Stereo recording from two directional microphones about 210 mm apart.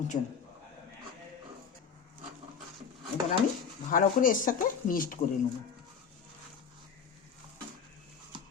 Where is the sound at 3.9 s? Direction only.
40° left (ahead or behind).